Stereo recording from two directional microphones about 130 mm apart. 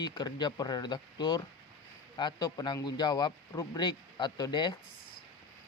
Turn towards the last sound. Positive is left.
turn(degrees=35)  # may be behind; listen again after turning